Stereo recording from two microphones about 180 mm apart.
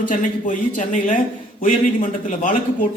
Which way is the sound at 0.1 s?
45° left (ahead or behind).